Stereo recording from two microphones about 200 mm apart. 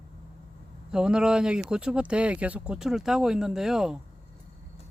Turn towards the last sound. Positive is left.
turn(degrees=0)  # may be behind; listen again after turning